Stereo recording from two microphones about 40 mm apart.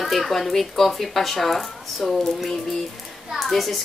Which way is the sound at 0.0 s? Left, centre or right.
Centre.